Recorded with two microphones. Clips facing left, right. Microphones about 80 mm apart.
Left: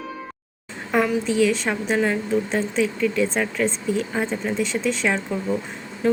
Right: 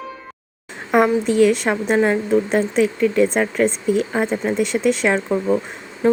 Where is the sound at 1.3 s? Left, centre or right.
Right.